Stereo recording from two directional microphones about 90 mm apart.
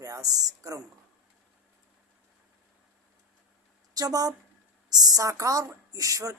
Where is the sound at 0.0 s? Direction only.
40° right (ahead or behind).